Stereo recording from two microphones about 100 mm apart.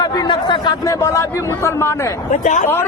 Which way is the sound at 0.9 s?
30° left (ahead or behind).